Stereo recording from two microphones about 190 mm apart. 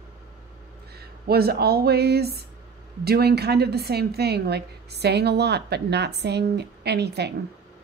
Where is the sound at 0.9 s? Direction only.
55° right (ahead or behind).